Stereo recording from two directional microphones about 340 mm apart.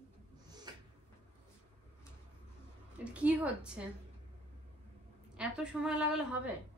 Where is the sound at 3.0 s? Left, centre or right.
Centre.